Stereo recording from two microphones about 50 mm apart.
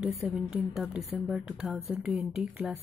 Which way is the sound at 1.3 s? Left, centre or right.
Right.